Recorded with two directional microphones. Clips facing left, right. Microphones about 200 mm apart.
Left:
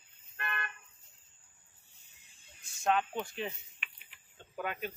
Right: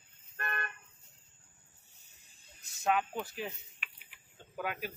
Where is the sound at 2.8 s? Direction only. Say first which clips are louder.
Left 1 dB; 5° right (ahead or behind).